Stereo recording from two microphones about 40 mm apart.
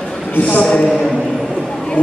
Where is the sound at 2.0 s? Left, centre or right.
Left.